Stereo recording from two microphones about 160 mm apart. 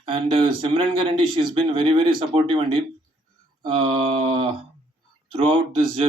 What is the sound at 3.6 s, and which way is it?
Mantra, 30° right (ahead or behind).